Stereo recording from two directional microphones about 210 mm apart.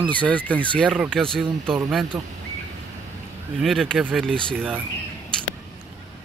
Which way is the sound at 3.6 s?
Centre (ahead or behind).